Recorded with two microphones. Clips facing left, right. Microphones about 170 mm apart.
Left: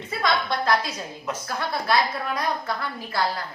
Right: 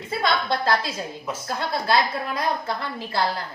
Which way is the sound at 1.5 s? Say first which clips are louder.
Right 2 dB; 25° right (ahead or behind).